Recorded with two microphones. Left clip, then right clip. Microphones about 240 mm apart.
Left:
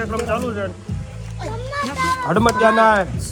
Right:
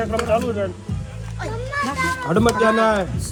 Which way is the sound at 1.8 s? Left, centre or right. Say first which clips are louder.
Even; centre.